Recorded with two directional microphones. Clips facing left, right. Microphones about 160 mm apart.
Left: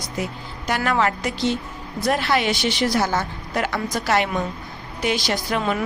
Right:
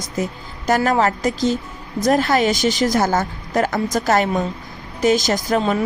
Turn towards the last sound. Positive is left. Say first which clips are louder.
# right 4 dB
turn(degrees=-30)  # may be behind; listen again after turning